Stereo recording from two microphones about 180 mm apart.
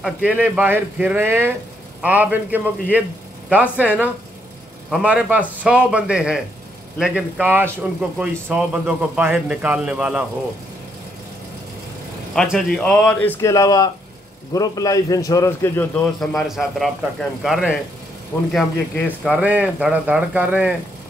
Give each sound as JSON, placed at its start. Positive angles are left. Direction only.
{"t": 0.0, "sound": "a man's voice", "side_deg": -5}
{"t": 12.4, "sound": "a man's voice", "side_deg": 0}
{"t": 16.2, "sound": "a man's voice", "side_deg": 0}